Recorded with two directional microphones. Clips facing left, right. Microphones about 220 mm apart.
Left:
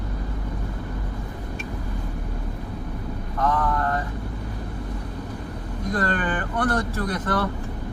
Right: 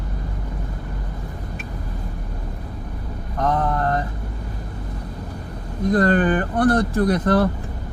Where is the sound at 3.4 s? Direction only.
35° right (ahead or behind).